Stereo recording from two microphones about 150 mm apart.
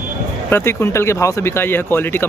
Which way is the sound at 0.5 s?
15° left (ahead or behind).